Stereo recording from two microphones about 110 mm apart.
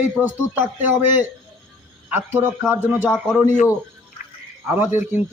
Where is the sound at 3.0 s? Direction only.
10° left (ahead or behind).